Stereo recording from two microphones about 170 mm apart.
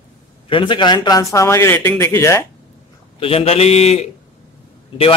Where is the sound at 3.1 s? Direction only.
35° left (ahead or behind).